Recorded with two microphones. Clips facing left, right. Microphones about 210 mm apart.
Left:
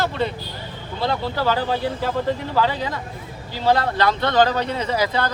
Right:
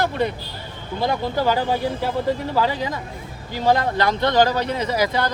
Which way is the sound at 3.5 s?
15° right (ahead or behind).